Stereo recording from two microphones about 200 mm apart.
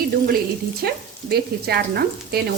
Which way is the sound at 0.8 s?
50° right (ahead or behind).